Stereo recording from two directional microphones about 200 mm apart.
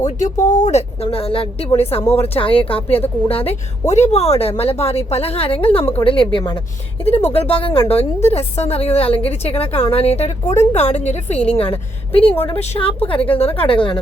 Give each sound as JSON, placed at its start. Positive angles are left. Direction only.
{"t": 0.4, "sound": "a woman's voice", "side_deg": 40}
{"t": 10.4, "sound": "a woman's voice", "side_deg": 15}
{"t": 10.7, "sound": "a woman's voice", "side_deg": 30}